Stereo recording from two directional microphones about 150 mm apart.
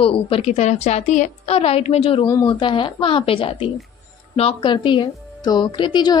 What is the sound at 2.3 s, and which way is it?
A woman's voice, 25° left (ahead or behind).